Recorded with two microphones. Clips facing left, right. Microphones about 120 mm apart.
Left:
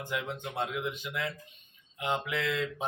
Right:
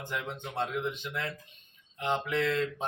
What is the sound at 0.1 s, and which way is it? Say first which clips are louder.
Speech: left 1 dB; 10° left (ahead or behind).